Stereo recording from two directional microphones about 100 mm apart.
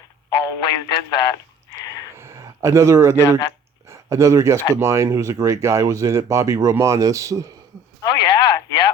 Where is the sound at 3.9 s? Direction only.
30° right (ahead or behind).